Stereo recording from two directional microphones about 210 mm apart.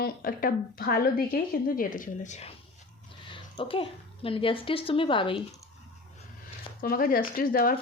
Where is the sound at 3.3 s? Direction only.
25° left (ahead or behind).